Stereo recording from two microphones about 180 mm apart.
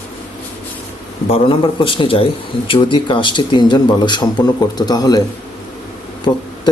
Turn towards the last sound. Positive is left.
turn(degrees=25)  # may be behind; listen again after turning